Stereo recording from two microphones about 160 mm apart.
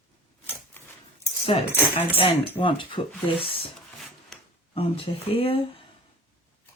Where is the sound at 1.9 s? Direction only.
35° left (ahead or behind).